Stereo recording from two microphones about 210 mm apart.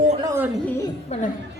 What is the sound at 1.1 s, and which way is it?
Speech, 30° left (ahead or behind).